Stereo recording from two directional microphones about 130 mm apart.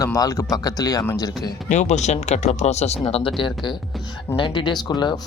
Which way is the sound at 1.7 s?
65° left (ahead or behind).